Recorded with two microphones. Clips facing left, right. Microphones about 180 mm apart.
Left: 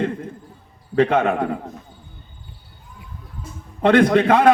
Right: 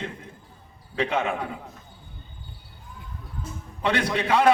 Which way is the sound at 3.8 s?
55° left (ahead or behind).